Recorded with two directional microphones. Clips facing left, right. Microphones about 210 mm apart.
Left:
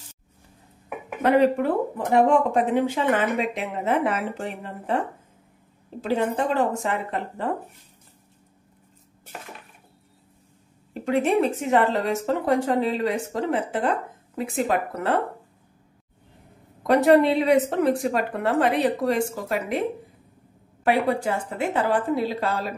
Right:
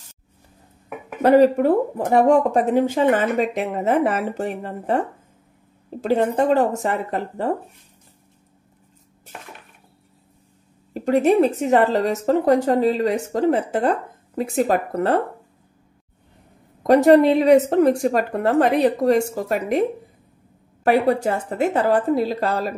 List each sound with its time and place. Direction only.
1.2 s a woman's voice: 40° right (ahead or behind)
10.9 s a woman's voice: 40° right (ahead or behind)
16.8 s speech: 45° right (ahead or behind)
20.8 s a woman's voice: 45° right (ahead or behind)